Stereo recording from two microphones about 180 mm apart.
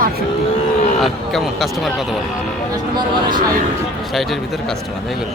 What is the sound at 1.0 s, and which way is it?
Speech, centre (ahead or behind).